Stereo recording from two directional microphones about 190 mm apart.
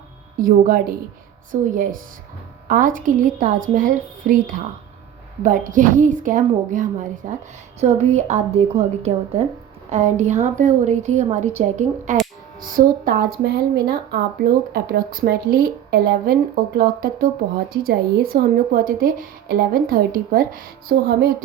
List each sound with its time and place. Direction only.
0.3 s speech: 45° right (ahead or behind)